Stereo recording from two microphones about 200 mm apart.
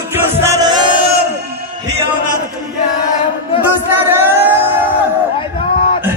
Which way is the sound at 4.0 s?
10° right (ahead or behind).